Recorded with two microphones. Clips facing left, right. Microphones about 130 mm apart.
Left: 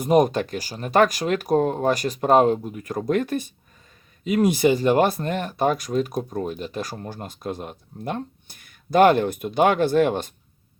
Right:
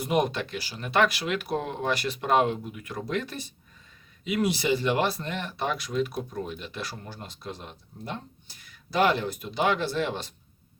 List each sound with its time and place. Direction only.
0.0 s speech: 40° left (ahead or behind)